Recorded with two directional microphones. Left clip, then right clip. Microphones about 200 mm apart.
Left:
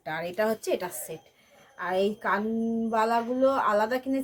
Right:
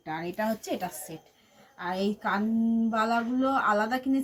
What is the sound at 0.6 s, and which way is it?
A woman's voice, 35° left (ahead or behind).